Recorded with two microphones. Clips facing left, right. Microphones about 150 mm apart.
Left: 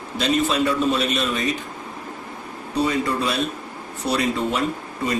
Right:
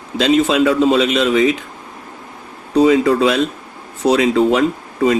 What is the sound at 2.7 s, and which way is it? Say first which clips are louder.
A man's voice: right 10 dB; 90° right.